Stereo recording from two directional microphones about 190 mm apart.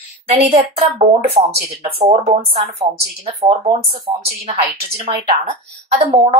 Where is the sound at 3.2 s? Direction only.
30° right (ahead or behind).